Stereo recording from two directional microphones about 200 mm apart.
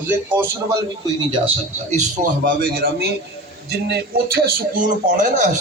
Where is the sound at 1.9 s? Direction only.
40° right (ahead or behind).